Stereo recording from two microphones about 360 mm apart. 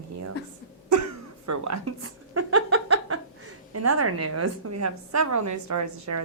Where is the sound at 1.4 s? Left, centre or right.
Right.